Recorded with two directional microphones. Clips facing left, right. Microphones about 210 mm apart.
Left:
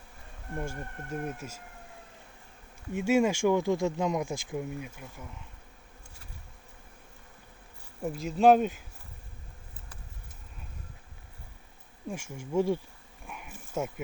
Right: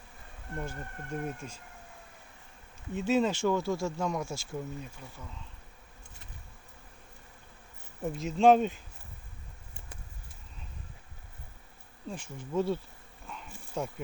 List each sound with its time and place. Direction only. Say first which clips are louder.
0.5 s speech: left 2 dB; 10° left (ahead or behind)
2.9 s speech: left 2 dB; 10° left (ahead or behind)
8.0 s speech: left 1 dB; centre (ahead or behind)
12.0 s speech: left 2 dB; 10° left (ahead or behind)